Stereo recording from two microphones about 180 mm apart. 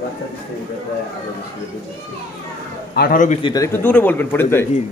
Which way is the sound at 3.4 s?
20° left (ahead or behind).